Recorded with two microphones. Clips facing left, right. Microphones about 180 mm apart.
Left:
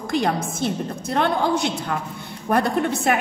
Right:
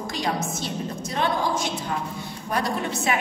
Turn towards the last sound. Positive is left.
turn(degrees=55)  # may be behind; listen again after turning